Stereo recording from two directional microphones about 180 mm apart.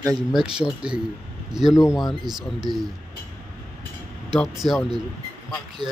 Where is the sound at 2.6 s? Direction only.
25° right (ahead or behind).